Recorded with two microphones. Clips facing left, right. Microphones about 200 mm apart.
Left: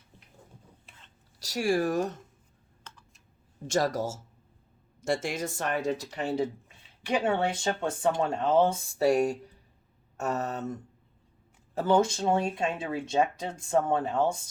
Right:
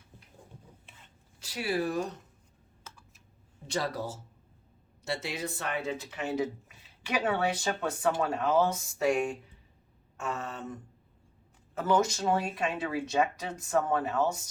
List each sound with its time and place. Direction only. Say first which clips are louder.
1.4 s speech: left 5 dB; 40° left (ahead or behind)
2.8 s computer keyboard: even; 10° right (ahead or behind)
3.7 s speech: left 5 dB; 45° left (ahead or behind)
11.7 s speech: left 3 dB; 30° left (ahead or behind)